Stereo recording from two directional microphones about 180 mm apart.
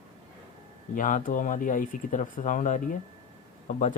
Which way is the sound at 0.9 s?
45° left (ahead or behind).